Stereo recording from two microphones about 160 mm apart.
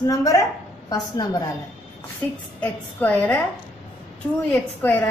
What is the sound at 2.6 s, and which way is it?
Speech, 10° left (ahead or behind).